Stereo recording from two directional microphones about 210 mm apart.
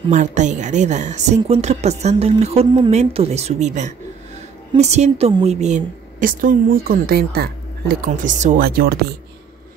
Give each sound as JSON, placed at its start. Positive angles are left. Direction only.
{"t": 0.1, "sound": "a woman's voice", "side_deg": -35}